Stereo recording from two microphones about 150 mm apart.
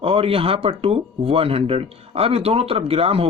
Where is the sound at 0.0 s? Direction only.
40° right (ahead or behind).